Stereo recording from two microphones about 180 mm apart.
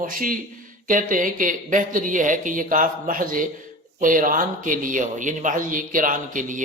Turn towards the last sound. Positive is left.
turn(degrees=-45)  # may be behind; listen again after turning